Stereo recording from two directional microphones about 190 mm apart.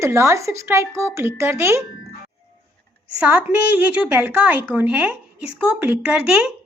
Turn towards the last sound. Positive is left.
turn(degrees=-5)  # may be behind; listen again after turning